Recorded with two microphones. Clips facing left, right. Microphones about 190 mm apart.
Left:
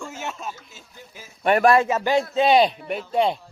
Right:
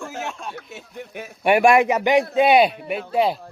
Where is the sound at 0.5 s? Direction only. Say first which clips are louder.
Right 11 dB; 65° right (ahead or behind).